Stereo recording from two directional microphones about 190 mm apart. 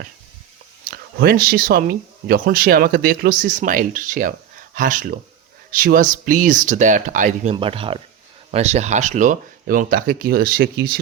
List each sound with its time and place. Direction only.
0.9 s speech: 50° right (ahead or behind)
7.5 s speech: 30° right (ahead or behind); by 10.9 s 55° right (ahead or behind)